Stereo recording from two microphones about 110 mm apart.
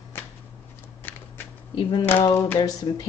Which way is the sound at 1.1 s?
15° left (ahead or behind).